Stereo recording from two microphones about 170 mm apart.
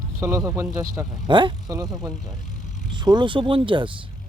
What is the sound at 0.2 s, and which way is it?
Speech, 20° right (ahead or behind).